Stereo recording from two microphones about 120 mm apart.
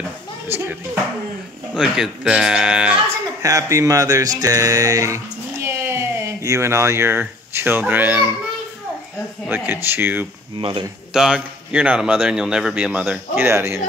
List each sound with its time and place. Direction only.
1.8 s a man's voice: 5° right (ahead or behind)
3.4 s speech: 25° right (ahead or behind)
9.5 s a man's voice: 15° right (ahead or behind)
10.6 s speech: 45° right (ahead or behind)
11.1 s a man's voice: 5° right (ahead or behind)